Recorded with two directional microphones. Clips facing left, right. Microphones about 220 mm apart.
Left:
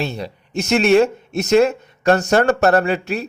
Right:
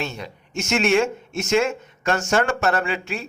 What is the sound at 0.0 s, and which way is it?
Speech, 35° left (ahead or behind).